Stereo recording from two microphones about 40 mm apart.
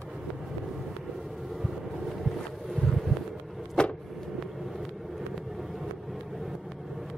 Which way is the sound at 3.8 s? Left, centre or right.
Centre.